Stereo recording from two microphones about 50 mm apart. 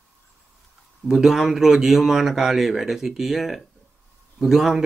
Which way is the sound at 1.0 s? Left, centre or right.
Centre.